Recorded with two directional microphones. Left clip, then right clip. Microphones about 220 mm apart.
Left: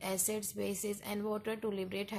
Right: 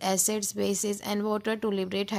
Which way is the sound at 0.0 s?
40° right (ahead or behind).